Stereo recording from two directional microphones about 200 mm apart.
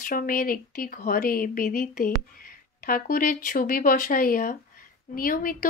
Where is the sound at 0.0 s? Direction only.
45° left (ahead or behind).